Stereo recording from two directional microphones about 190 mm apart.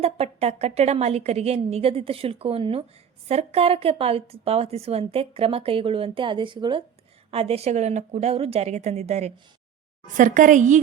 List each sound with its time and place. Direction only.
0.0 s speech: 35° right (ahead or behind)